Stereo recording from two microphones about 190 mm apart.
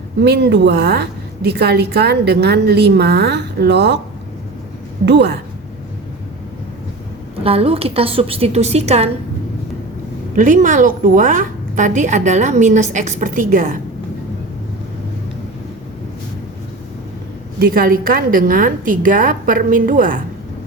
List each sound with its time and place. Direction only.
0.2 s a woman's voice: 60° right (ahead or behind)
5.0 s a woman's voice: 65° right (ahead or behind)
7.4 s a woman's voice: 30° right (ahead or behind)
10.3 s a woman's voice: 45° right (ahead or behind)
17.6 s a woman's voice: 50° right (ahead or behind)